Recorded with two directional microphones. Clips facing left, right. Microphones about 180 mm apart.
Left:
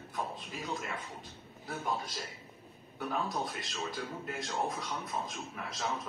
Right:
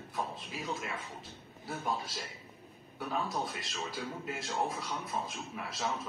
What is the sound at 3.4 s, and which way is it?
Speech, centre (ahead or behind).